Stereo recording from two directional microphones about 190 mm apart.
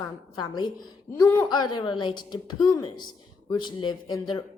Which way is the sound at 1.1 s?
10° left (ahead or behind).